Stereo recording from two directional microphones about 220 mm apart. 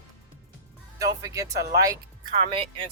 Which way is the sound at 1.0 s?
15° right (ahead or behind).